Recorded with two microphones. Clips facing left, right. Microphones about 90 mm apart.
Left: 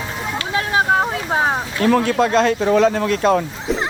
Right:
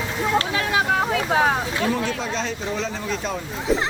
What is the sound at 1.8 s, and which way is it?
Speech, 65° left (ahead or behind).